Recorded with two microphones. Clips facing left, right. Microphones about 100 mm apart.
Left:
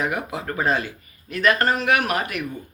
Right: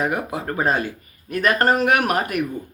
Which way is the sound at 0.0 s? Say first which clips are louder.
Right 2 dB; 40° right (ahead or behind).